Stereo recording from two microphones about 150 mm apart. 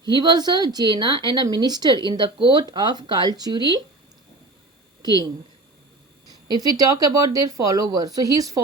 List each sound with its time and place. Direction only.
0.2 s speech: 30° right (ahead or behind)
6.5 s speech: 25° right (ahead or behind)